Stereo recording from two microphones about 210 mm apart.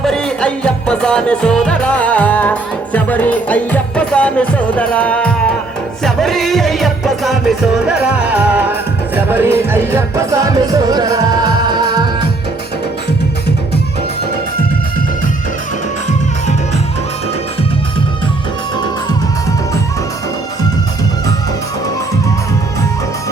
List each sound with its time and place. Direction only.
0.0 s music: 5° left (ahead or behind); by 12.3 s 20° right (ahead or behind)